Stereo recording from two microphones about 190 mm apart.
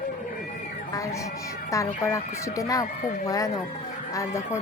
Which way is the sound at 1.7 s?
15° left (ahead or behind).